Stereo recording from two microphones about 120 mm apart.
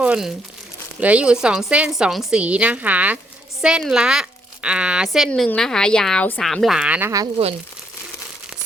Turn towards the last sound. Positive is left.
turn(degrees=-50)  # may be behind; listen again after turning